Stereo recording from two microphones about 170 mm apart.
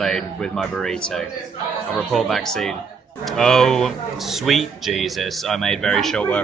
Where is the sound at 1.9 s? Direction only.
Centre (ahead or behind).